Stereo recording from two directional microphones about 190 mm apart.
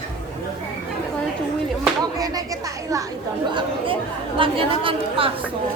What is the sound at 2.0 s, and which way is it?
Speech, 20° right (ahead or behind).